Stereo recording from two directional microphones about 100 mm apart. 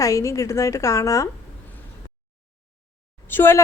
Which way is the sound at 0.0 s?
30° left (ahead or behind).